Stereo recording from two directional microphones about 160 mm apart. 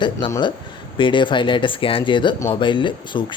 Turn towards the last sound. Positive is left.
turn(degrees=30)  # may be behind; listen again after turning